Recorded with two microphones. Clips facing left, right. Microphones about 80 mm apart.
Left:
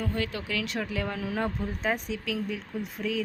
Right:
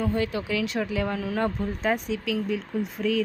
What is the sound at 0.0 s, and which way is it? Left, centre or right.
Speech, centre.